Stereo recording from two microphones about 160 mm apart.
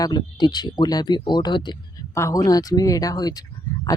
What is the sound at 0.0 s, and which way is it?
Speech, 25° left (ahead or behind).